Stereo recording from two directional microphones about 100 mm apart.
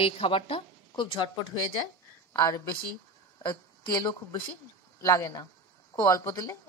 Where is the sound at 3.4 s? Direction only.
45° left (ahead or behind).